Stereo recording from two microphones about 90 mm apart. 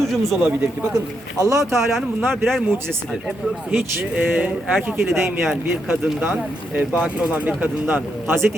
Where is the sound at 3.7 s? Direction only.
20° right (ahead or behind).